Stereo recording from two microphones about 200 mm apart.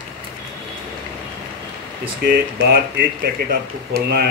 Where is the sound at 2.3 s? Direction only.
50° right (ahead or behind).